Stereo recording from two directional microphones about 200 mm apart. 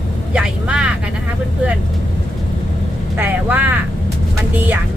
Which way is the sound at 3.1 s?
10° right (ahead or behind).